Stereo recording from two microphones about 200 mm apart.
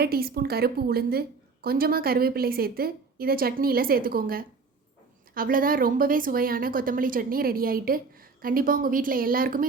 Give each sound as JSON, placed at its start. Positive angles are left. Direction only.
{"t": 0.0, "sound": "speech", "side_deg": -50}